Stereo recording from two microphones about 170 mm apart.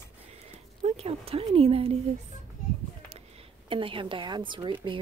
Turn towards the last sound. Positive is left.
turn(degrees=-30)  # may be behind; listen again after turning